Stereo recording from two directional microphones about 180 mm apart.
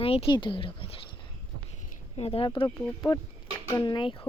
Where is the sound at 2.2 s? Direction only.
30° left (ahead or behind).